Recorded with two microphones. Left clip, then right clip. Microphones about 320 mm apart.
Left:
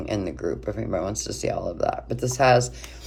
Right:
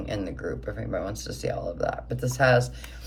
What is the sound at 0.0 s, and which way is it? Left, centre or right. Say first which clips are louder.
Speech: left 4 dB; centre.